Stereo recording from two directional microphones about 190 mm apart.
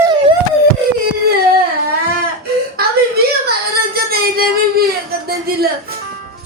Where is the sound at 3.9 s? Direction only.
55° right (ahead or behind).